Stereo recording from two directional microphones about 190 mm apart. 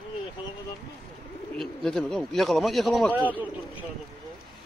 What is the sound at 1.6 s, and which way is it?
Speech, centre (ahead or behind).